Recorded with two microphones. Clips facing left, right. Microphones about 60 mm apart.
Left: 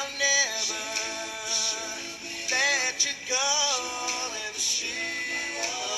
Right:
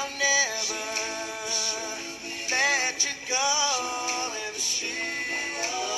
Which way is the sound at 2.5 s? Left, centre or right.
Right.